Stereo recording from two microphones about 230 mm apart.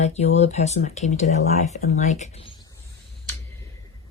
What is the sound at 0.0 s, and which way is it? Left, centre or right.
Speech, left.